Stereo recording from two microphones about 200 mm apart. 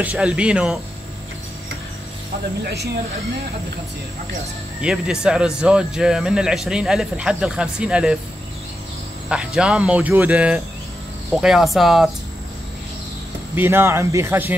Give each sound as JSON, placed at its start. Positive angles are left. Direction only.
{"t": 0.0, "sound": "speech", "side_deg": -5}
{"t": 2.6, "sound": "speech", "side_deg": -55}
{"t": 4.8, "sound": "speech", "side_deg": -5}
{"t": 9.3, "sound": "speech", "side_deg": -5}
{"t": 13.6, "sound": "speech", "side_deg": -10}